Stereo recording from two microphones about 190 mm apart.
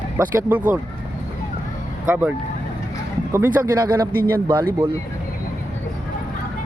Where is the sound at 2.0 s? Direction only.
10° right (ahead or behind).